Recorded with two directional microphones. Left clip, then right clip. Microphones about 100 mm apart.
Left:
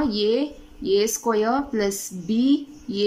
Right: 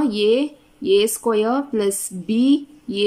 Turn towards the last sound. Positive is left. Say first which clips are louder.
# right 3 dB
turn(degrees=-25)  # may be behind; listen again after turning